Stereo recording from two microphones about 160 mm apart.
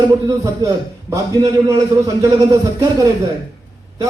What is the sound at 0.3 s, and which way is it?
A man's voice, 20° right (ahead or behind).